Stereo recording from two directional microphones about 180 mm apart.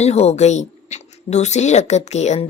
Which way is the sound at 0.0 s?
35° left (ahead or behind).